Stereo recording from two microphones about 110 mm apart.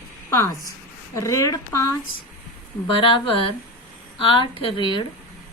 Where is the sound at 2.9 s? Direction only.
50° left (ahead or behind).